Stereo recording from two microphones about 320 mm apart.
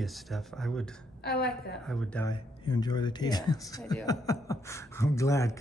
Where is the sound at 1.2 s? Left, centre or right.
Left.